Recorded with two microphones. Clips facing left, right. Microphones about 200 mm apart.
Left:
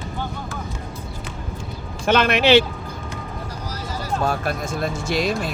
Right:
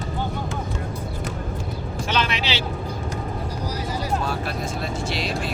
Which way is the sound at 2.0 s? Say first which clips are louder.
Left 10 dB; 55° left (ahead or behind).